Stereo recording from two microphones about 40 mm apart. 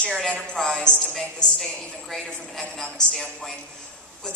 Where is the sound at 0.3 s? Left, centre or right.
Left.